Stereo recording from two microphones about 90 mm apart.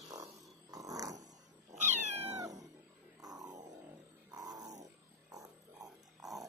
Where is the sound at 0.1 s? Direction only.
40° right (ahead or behind).